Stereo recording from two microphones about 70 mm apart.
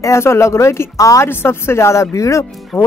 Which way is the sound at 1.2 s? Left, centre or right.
Left.